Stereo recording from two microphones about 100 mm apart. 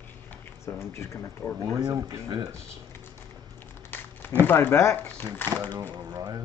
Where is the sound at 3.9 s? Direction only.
20° left (ahead or behind).